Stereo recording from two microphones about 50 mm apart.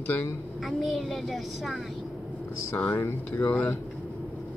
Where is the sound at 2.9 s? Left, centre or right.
Left.